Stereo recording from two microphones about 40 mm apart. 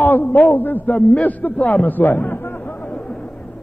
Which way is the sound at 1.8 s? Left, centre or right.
Left.